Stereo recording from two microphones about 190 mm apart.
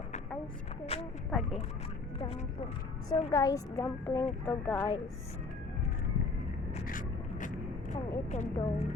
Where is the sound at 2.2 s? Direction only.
30° left (ahead or behind).